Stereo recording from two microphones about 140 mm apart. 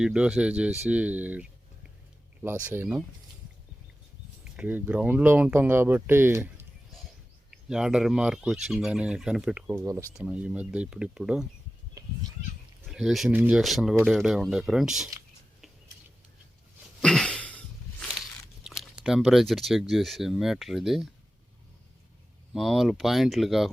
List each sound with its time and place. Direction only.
0.0 s speech: 5° right (ahead or behind)
2.6 s speech: 10° right (ahead or behind)
4.4 s speech: 10° right (ahead or behind)
7.5 s speech: 5° right (ahead or behind)
12.0 s a sound: 25° right (ahead or behind)
12.8 s speech: 5° right (ahead or behind)
13.6 s speech: centre (ahead or behind)
17.0 s a sound: 5° left (ahead or behind)
18.6 s speech: 5° right (ahead or behind)
22.5 s speech: centre (ahead or behind)